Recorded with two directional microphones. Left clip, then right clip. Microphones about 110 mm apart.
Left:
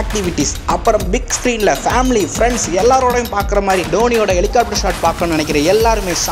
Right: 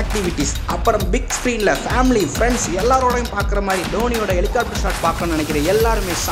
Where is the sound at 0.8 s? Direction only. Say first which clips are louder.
Left 2 dB; 20° left (ahead or behind).